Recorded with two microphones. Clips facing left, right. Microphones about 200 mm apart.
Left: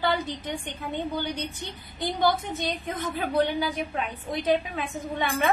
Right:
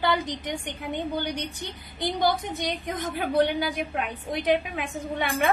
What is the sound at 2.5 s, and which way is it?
A woman's voice, 15° right (ahead or behind).